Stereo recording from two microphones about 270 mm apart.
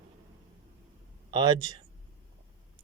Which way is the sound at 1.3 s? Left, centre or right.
Centre.